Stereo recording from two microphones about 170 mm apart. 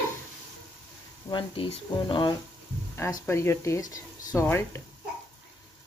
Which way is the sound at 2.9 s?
15° left (ahead or behind).